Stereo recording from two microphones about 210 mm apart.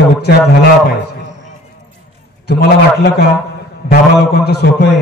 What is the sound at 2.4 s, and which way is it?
Speech, 50° left (ahead or behind).